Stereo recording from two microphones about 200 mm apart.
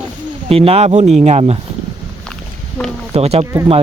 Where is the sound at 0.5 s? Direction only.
30° right (ahead or behind).